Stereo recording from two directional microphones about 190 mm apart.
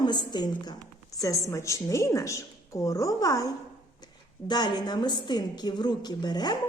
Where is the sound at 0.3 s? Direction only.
20° left (ahead or behind).